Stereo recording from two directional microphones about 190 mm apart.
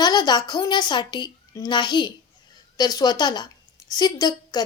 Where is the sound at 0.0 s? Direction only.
20° left (ahead or behind).